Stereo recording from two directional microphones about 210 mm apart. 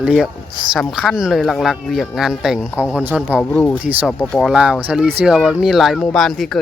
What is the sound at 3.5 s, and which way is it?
Speech, 10° left (ahead or behind).